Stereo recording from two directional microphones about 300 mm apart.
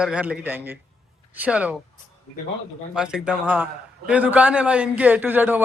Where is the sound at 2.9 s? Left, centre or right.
Centre.